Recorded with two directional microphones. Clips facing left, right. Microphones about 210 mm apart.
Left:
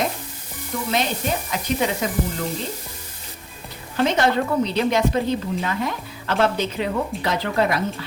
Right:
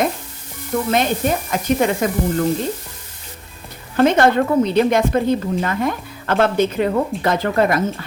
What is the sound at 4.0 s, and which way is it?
A woman's voice, 55° right (ahead or behind).